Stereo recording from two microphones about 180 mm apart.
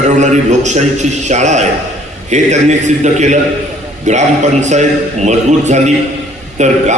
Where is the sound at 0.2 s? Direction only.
40° right (ahead or behind).